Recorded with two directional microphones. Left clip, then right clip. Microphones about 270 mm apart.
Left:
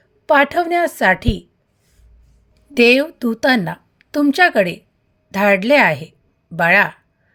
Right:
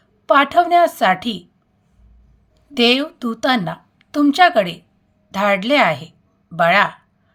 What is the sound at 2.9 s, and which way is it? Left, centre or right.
Speech, left.